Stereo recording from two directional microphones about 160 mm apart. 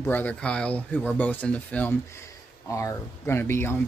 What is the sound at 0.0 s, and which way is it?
Speech, 10° left (ahead or behind).